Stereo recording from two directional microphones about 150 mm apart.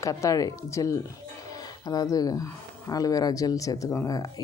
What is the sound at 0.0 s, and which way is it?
Speech, 20° left (ahead or behind).